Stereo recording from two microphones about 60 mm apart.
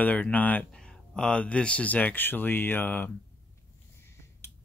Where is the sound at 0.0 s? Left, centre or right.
Left.